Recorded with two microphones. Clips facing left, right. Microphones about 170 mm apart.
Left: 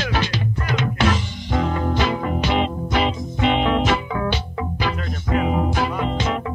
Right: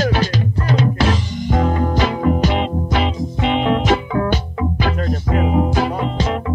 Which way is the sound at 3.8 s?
45° right (ahead or behind).